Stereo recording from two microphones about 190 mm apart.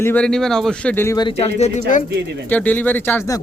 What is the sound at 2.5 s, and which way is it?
Speech, 10° left (ahead or behind).